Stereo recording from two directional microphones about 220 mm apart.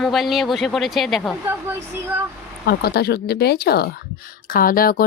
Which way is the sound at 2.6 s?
45° left (ahead or behind).